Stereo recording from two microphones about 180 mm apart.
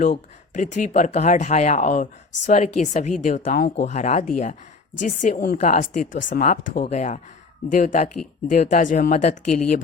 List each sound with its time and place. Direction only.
0.0 s speech: 45° left (ahead or behind)